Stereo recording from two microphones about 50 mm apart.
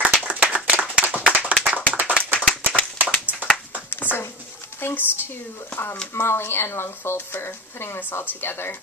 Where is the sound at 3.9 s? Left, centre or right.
Left.